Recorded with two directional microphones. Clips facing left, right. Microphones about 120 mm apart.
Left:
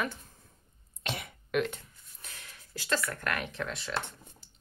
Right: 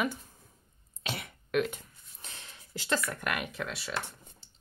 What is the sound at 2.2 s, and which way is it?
Speech, 25° right (ahead or behind).